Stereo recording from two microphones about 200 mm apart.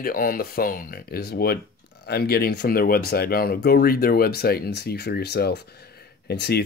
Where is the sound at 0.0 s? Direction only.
45° left (ahead or behind).